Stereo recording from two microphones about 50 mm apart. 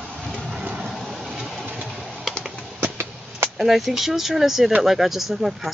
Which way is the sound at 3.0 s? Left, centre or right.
Right.